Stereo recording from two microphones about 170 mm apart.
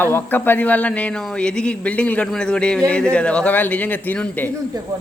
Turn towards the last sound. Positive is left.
turn(degrees=10)  # may be behind; listen again after turning